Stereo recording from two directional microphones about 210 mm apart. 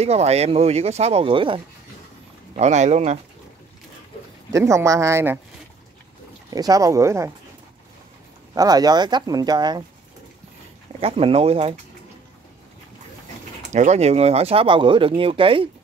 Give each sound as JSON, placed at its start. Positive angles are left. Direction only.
{"t": 0.0, "sound": "speech", "side_deg": -30}
{"t": 4.5, "sound": "speech", "side_deg": -15}
{"t": 6.5, "sound": "speech", "side_deg": -15}
{"t": 8.5, "sound": "speech", "side_deg": -20}
{"t": 11.0, "sound": "speech", "side_deg": -25}
{"t": 13.6, "sound": "speech", "side_deg": -35}